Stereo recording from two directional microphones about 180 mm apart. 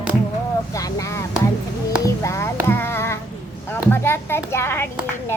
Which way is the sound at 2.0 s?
15° left (ahead or behind).